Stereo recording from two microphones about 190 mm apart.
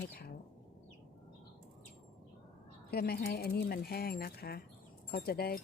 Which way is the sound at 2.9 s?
55° left (ahead or behind).